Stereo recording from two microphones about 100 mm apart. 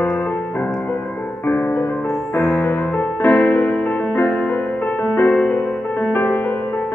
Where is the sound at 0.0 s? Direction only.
15° left (ahead or behind).